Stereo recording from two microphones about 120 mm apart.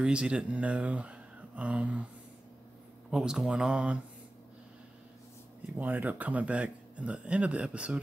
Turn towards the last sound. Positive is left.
turn(degrees=-10)  # may be behind; listen again after turning